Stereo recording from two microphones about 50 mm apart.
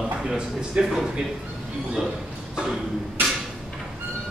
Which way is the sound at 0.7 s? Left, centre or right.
Centre.